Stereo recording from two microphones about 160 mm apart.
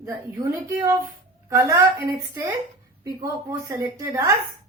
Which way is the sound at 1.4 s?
20° right (ahead or behind).